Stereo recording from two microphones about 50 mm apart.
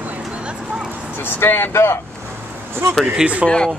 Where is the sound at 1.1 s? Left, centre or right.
Left.